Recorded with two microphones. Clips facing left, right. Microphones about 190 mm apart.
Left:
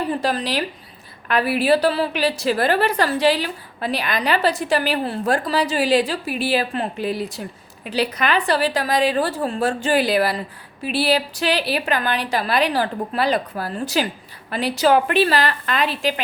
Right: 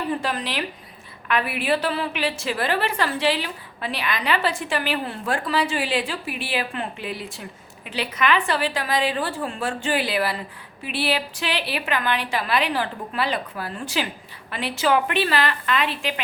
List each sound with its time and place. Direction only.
0.1 s a woman's voice: 35° left (ahead or behind)